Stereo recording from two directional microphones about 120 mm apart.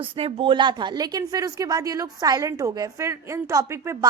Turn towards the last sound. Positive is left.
turn(degrees=-25)  # may be behind; listen again after turning